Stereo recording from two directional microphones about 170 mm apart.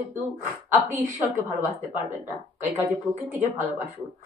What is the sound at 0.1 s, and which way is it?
Speech, 15° right (ahead or behind).